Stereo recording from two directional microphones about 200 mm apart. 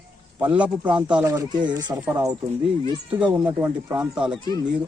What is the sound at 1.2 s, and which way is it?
Speech, 15° right (ahead or behind).